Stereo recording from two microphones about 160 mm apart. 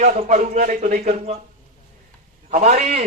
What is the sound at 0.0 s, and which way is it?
Speech, 50° right (ahead or behind).